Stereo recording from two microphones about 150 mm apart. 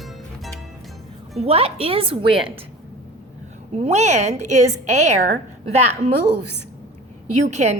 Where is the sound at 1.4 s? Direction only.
40° right (ahead or behind).